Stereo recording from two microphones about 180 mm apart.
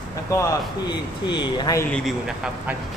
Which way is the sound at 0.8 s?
25° left (ahead or behind).